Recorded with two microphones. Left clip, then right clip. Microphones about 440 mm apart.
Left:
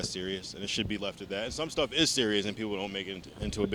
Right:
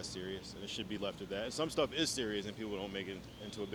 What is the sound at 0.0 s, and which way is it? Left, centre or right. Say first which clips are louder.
Speech: left 8 dB; left.